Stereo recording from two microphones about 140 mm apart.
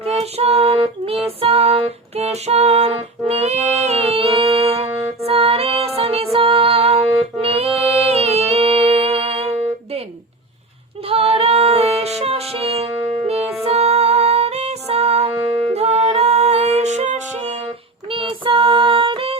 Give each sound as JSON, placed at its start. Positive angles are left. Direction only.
{"t": 0.2, "sound": "child singing", "side_deg": -45}
{"t": 11.0, "sound": "music", "side_deg": -40}
{"t": 13.4, "sound": "music", "side_deg": 0}
{"t": 13.7, "sound": "music", "side_deg": -50}
{"t": 15.4, "sound": "music", "side_deg": -35}
{"t": 18.1, "sound": "child singing", "side_deg": -40}